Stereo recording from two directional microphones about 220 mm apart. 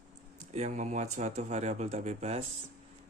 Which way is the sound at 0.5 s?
30° right (ahead or behind).